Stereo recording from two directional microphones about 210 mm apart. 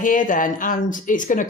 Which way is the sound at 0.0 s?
40° left (ahead or behind).